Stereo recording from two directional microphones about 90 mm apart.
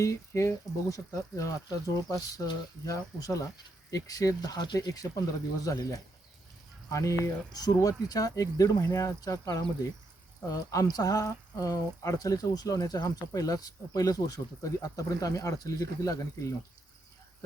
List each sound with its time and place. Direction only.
0.0 s speech: 35° left (ahead or behind)